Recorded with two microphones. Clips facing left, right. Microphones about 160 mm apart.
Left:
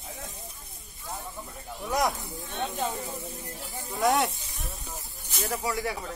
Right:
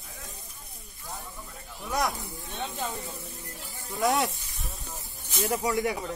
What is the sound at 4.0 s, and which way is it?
Snake, centre (ahead or behind).